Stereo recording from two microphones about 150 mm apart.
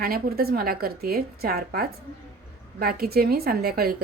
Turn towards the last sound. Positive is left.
turn(degrees=-85)